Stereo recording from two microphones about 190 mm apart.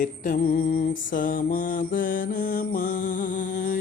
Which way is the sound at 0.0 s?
45° left (ahead or behind).